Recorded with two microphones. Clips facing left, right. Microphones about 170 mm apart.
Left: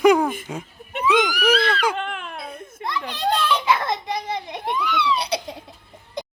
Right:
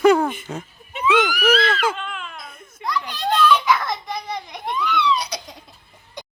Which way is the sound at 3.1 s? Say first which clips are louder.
Right 3 dB; 25° left (ahead or behind).